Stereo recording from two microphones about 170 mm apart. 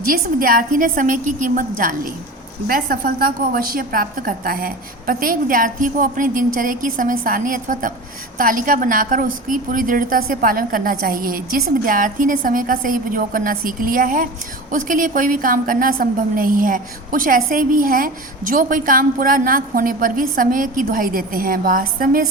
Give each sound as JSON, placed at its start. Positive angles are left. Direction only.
{"t": 0.1, "sound": "a woman's voice", "side_deg": -55}